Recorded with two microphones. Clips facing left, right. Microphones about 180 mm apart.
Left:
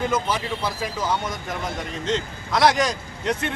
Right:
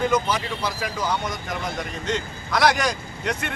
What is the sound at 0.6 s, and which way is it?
Speech, 25° left (ahead or behind).